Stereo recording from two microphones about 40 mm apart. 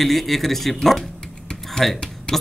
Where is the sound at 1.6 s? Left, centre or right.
Centre.